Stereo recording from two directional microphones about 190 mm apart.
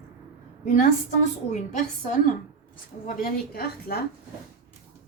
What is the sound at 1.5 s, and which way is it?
Speech, 40° left (ahead or behind).